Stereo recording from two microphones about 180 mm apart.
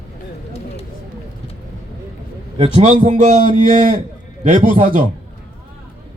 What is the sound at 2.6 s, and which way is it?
A man's voice, 35° right (ahead or behind).